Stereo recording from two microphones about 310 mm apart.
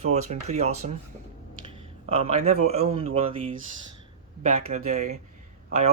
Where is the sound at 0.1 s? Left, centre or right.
Right.